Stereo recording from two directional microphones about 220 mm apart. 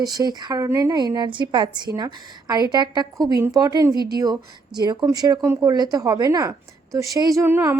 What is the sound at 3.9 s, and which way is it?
Speech, 45° right (ahead or behind).